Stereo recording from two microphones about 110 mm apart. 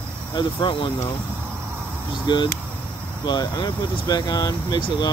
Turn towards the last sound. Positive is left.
turn(degrees=45)  # may be behind; listen again after turning